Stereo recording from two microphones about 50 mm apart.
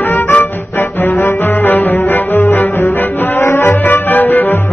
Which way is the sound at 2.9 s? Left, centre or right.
Left.